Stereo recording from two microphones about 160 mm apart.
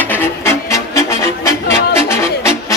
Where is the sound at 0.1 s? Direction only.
15° left (ahead or behind).